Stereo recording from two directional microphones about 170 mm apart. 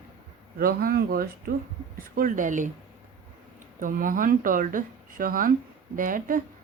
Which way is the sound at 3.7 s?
50° right (ahead or behind).